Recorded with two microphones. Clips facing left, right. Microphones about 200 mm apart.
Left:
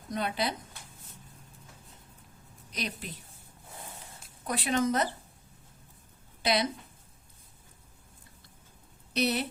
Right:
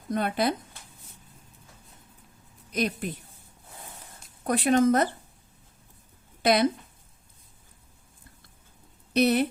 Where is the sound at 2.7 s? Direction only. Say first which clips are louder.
Right 9 dB; 50° right (ahead or behind).